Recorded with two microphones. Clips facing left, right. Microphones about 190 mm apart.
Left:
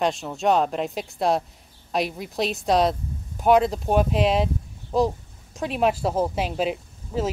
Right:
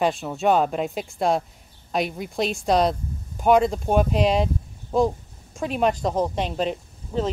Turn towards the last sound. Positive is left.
turn(degrees=5)  # may be behind; listen again after turning